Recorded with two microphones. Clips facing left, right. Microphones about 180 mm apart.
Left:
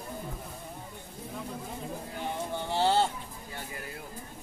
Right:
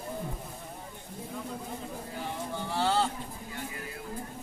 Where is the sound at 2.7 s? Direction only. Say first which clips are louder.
Left 2 dB; 25° left (ahead or behind).